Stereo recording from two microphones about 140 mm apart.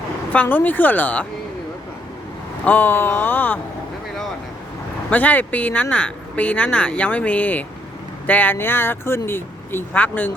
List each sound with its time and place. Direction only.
0.3 s speech: 15° left (ahead or behind)
2.6 s speech: 15° left (ahead or behind)
5.1 s speech: 10° left (ahead or behind)